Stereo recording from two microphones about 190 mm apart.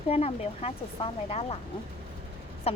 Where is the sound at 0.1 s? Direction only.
30° left (ahead or behind).